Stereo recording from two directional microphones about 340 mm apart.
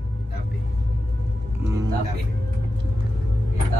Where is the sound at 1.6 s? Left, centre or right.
Centre.